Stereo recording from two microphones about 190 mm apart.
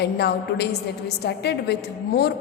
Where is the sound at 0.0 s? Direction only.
60° left (ahead or behind).